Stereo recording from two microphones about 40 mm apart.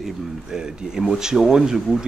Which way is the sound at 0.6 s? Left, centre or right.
Centre.